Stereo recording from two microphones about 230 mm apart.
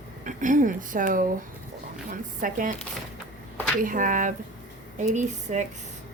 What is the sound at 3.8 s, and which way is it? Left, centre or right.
Speech, right.